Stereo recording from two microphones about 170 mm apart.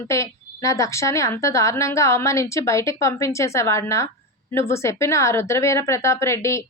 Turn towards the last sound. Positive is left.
turn(degrees=15)  # may be behind; listen again after turning